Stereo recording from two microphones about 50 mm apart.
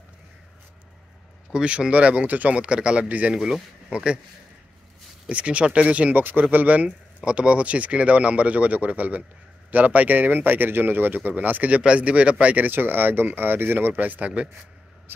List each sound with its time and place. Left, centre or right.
1.5 s speech: centre
5.3 s speech: right
6.1 s a man's voice: right
7.2 s a man's voice: right
12.6 s a man's voice: right
15.1 s speech: right